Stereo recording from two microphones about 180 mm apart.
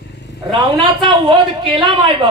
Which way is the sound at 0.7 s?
30° right (ahead or behind).